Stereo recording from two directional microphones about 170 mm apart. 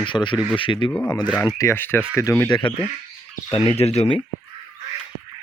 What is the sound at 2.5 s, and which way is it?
Speech, 30° left (ahead or behind).